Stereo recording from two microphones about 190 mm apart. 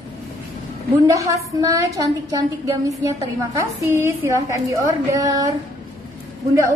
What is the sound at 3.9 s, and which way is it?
A woman's voice, 15° right (ahead or behind).